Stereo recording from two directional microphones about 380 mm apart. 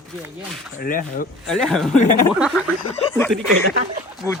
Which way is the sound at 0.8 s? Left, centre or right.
Left.